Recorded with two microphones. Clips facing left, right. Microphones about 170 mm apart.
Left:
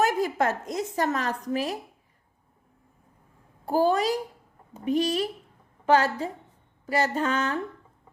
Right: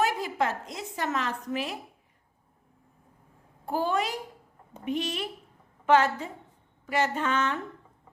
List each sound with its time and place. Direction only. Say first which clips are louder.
0.0 s a woman's voice: left 3 dB; 45° left (ahead or behind)
3.7 s speech: left 6 dB; 35° left (ahead or behind)